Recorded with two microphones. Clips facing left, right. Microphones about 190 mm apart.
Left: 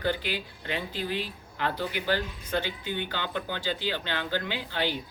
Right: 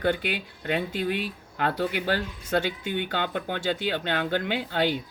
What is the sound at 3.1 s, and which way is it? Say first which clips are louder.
Speech: right 4 dB; 55° right (ahead or behind).